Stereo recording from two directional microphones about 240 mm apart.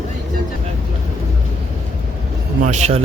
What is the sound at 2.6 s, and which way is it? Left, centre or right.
Music, right.